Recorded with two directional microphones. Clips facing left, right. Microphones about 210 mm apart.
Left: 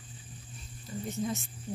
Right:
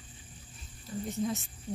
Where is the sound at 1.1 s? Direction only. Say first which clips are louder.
Right 1 dB; centre (ahead or behind).